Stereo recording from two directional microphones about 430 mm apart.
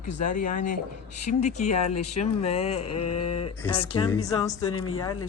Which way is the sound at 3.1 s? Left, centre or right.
Left.